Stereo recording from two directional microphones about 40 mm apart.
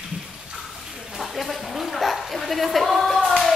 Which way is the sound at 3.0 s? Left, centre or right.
Centre.